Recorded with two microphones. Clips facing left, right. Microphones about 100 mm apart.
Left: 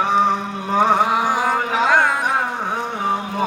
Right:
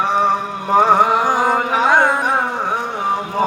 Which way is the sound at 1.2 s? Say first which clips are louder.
Right 3 dB; 30° right (ahead or behind).